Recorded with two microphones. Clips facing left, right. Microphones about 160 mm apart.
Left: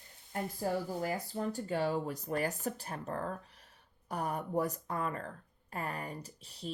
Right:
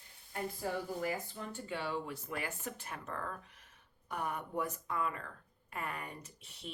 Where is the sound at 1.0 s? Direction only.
35° left (ahead or behind).